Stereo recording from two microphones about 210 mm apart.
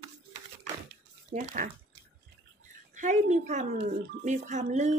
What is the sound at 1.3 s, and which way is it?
Speech, 40° right (ahead or behind).